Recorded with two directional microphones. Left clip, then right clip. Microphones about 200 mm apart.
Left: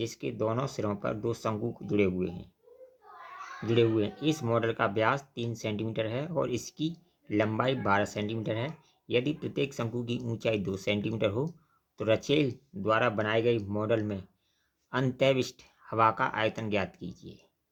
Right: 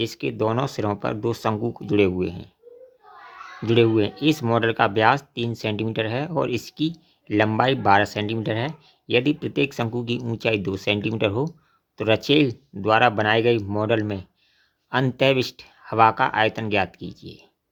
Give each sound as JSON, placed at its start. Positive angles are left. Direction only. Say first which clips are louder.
{"t": 0.0, "sound": "speech", "louder": "right 8 dB", "side_deg": -35}
{"t": 3.7, "sound": "speech", "louder": "right 8 dB", "side_deg": -40}